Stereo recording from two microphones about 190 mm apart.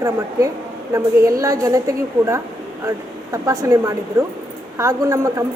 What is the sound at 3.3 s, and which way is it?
A woman's voice, 15° right (ahead or behind).